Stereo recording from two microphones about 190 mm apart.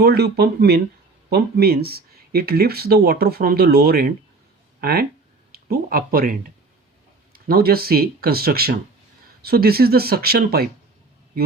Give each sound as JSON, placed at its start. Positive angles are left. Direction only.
{"t": 0.0, "sound": "speech", "side_deg": -55}
{"t": 7.3, "sound": "speech", "side_deg": -55}